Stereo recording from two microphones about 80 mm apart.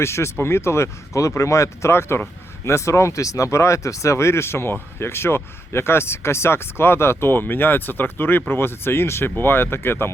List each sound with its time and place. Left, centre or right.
0.0 s speech: left